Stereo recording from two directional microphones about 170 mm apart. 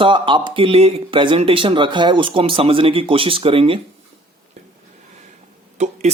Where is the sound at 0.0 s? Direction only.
30° right (ahead or behind).